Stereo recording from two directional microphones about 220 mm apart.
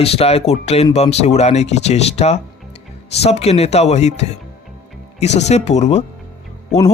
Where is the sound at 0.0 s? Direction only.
25° left (ahead or behind).